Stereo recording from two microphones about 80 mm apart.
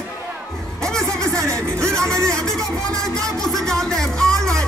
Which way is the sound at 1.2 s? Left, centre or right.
Right.